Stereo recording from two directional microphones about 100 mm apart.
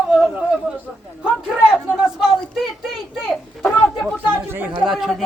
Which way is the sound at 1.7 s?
5° right (ahead or behind).